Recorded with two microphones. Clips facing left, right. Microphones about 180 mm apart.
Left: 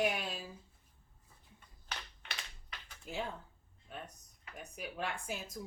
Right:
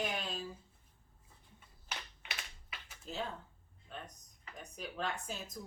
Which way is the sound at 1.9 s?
5° right (ahead or behind).